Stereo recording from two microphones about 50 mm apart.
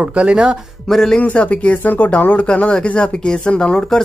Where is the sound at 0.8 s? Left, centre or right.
Centre.